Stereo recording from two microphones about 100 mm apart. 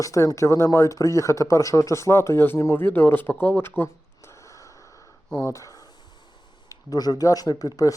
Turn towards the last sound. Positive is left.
turn(degrees=35)  # may be behind; listen again after turning